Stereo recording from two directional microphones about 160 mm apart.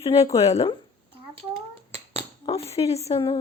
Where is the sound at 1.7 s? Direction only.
40° right (ahead or behind).